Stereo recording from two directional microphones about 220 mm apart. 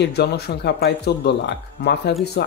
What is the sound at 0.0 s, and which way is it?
Speech, 50° left (ahead or behind).